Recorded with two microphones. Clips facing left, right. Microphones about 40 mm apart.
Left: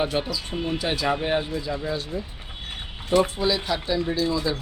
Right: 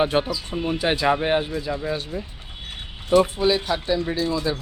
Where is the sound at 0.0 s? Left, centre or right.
Right.